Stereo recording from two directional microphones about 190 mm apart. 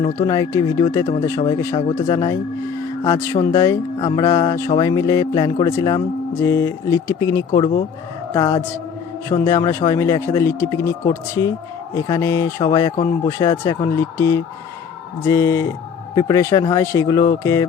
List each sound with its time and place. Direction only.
0.0 s speech: 20° left (ahead or behind)